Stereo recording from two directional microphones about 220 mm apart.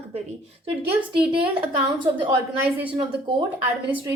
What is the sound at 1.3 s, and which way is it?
Speech, 25° right (ahead or behind).